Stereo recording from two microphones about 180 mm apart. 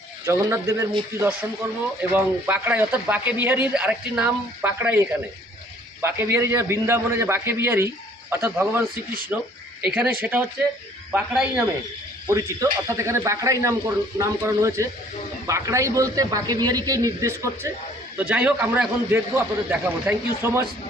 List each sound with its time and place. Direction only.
0.3 s a man's voice: 15° right (ahead or behind)